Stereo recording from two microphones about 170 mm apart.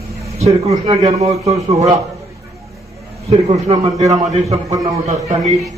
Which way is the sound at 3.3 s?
40° right (ahead or behind).